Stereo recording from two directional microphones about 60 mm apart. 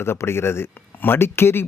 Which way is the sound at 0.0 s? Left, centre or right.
Left.